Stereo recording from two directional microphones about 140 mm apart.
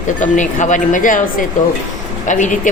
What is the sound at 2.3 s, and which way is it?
Speech, 65° left (ahead or behind).